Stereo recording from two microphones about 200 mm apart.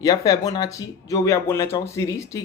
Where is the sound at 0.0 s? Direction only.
20° left (ahead or behind).